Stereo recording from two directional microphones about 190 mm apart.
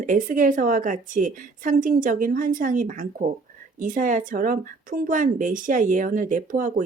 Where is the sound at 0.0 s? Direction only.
45° right (ahead or behind).